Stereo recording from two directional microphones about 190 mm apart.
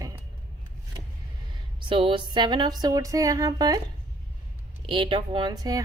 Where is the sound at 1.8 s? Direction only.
25° right (ahead or behind).